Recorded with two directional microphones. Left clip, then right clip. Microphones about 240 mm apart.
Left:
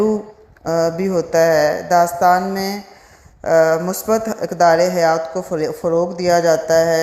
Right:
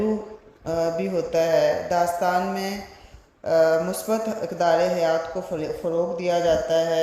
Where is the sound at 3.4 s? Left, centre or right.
Left.